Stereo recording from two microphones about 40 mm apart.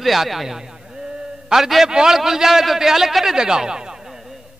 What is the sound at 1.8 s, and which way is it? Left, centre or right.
A man's voice, centre.